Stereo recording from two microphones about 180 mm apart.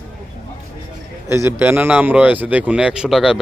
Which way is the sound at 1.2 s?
15° right (ahead or behind).